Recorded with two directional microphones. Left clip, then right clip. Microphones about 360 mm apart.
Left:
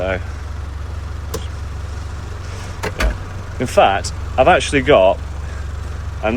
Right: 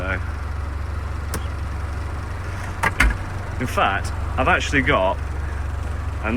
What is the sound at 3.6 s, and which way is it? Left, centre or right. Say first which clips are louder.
Speech: left 7 dB; centre.